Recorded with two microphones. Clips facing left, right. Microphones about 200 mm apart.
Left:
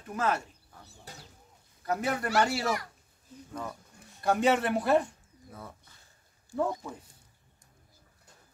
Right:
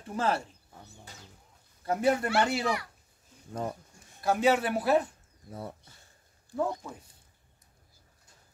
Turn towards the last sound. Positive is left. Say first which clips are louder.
# left 1 dB
turn(degrees=0)  # may be behind; listen again after turning